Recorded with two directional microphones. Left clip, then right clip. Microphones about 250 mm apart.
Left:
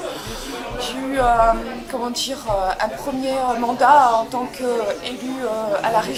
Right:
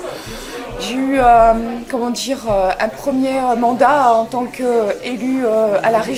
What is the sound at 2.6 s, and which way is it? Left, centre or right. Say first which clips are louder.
Speech: right 4 dB; left.